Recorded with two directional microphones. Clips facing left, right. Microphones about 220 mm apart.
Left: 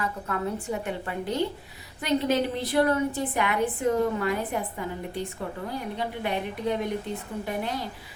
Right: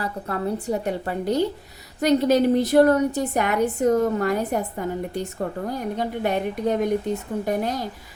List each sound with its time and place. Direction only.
0.0 s a woman's voice: 35° right (ahead or behind)